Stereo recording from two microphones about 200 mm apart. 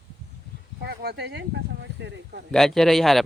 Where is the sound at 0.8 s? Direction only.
55° right (ahead or behind).